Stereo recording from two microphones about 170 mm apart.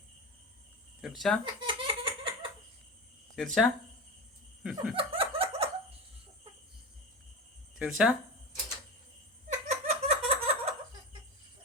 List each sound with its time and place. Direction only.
1.0 s laughter: centre (ahead or behind)
1.6 s laughter: 30° right (ahead or behind)
3.3 s laughter: centre (ahead or behind)
4.9 s a sound: 30° right (ahead or behind)
7.8 s laughter: 5° right (ahead or behind)
9.5 s giggle: 40° right (ahead or behind)